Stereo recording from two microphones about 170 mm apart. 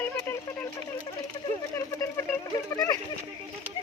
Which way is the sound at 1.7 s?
15° left (ahead or behind).